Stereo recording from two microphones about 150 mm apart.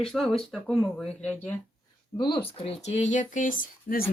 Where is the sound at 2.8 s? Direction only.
50° left (ahead or behind); by 4.0 s 70° left (ahead or behind).